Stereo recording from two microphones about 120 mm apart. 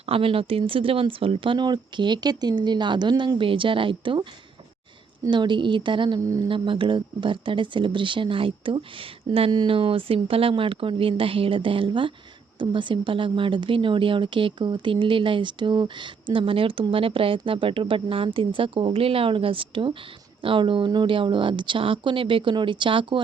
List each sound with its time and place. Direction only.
0.0 s a woman's voice: 50° right (ahead or behind)
5.3 s speech: 40° right (ahead or behind)
6.1 s speech: 25° right (ahead or behind)
6.5 s a woman's voice: 45° right (ahead or behind)